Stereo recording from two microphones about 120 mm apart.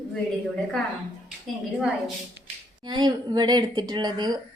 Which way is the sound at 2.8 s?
35° right (ahead or behind).